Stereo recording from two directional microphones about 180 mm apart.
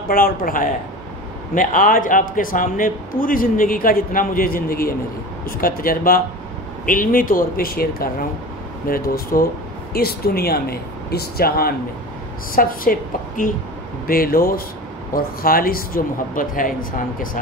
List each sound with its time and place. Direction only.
0.1 s a man's voice: 50° left (ahead or behind)